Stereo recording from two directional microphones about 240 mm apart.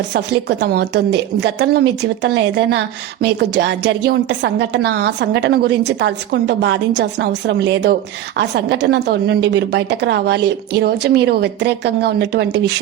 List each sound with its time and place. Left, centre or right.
0.1 s a woman's voice: right